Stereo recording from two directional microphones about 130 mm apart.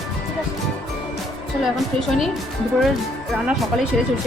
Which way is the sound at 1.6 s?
Centre (ahead or behind).